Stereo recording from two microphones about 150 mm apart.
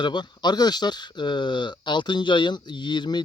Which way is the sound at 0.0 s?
30° left (ahead or behind).